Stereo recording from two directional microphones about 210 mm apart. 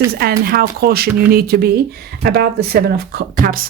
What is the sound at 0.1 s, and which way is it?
Speech, 45° right (ahead or behind).